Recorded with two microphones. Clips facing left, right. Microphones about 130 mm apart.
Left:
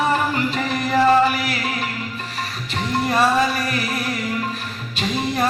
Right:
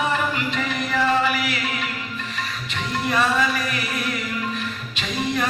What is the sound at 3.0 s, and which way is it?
Music, 35° left (ahead or behind).